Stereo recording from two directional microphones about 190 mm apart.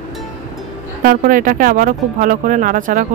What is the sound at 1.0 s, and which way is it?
Speech, 45° right (ahead or behind).